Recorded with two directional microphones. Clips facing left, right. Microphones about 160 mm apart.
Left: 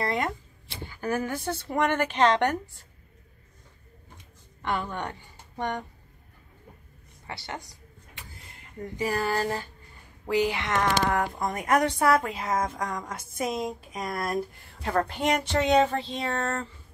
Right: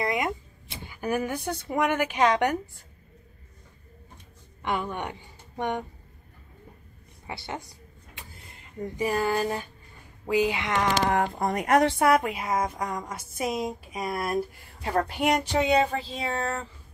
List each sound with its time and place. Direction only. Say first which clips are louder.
0.0 s speech: right 1 dB; 10° right (ahead or behind)
4.6 s speech: right 1 dB; 15° right (ahead or behind)
7.2 s a woman's voice: right 2 dB; 25° right (ahead or behind)
8.9 s a woman's voice: right 1 dB; 20° right (ahead or behind)
11.3 s a woman's voice: right 3 dB; 30° right (ahead or behind); by 16.6 s 5° right (ahead or behind)